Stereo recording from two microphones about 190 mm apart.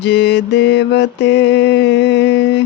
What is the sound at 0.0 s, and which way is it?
Mantra, 65° left (ahead or behind).